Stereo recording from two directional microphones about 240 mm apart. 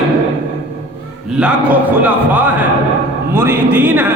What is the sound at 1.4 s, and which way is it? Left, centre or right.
A man's voice, centre.